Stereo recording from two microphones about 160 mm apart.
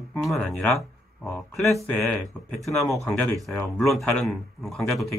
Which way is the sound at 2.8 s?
20° left (ahead or behind).